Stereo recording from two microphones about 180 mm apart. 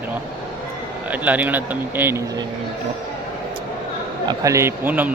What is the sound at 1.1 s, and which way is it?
Speech, 10° right (ahead or behind).